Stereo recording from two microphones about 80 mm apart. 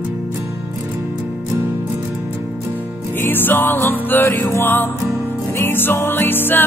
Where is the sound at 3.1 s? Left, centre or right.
Left.